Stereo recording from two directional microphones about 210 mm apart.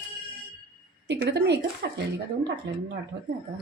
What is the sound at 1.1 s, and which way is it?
Speech, 55° right (ahead or behind).